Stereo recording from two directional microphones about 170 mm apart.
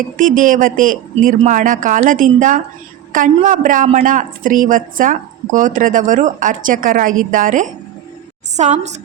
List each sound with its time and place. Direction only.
0.2 s a woman's voice: 50° right (ahead or behind)